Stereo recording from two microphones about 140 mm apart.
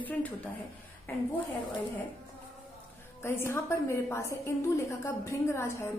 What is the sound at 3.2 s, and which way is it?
A woman's voice, 15° left (ahead or behind).